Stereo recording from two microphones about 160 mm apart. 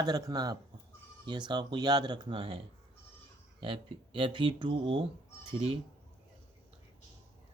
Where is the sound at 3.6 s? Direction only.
30° right (ahead or behind).